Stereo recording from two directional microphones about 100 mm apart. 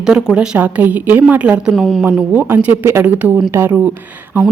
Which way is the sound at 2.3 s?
20° right (ahead or behind).